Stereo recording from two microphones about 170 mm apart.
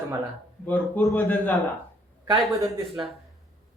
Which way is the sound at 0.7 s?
10° left (ahead or behind).